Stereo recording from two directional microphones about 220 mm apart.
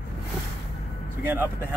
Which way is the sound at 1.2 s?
10° right (ahead or behind).